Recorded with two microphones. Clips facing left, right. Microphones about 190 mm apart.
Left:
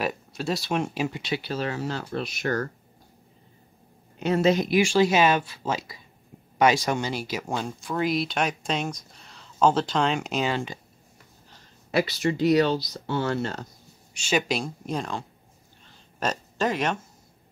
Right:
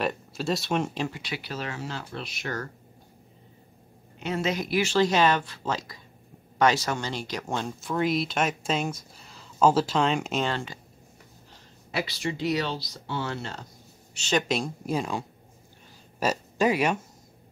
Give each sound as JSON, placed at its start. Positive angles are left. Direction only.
{"t": 0.0, "sound": "speech", "side_deg": 0}
{"t": 1.1, "sound": "speech", "side_deg": 25}
{"t": 4.2, "sound": "speech", "side_deg": 40}
{"t": 4.6, "sound": "speech", "side_deg": 15}
{"t": 10.5, "sound": "speech", "side_deg": 15}
{"t": 12.2, "sound": "speech", "side_deg": 50}
{"t": 14.1, "sound": "speech", "side_deg": 10}
{"t": 14.5, "sound": "speech", "side_deg": -5}